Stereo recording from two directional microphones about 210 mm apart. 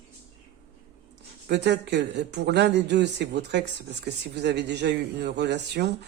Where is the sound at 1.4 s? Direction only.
55° right (ahead or behind).